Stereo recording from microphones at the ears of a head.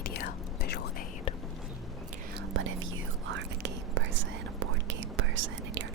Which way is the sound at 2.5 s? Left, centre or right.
Right.